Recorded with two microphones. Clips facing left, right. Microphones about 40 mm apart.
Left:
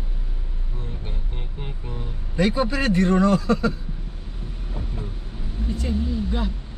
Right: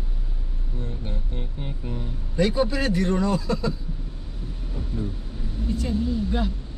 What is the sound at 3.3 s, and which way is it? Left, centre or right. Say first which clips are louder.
Speech: left 5 dB; left.